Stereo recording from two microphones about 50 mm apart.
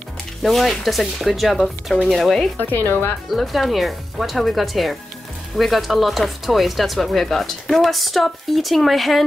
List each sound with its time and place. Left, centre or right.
0.4 s speech: centre
2.6 s speech: left
3.3 s speech: centre